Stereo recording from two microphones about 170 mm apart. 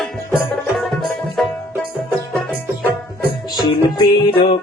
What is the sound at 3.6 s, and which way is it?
Music, 25° left (ahead or behind).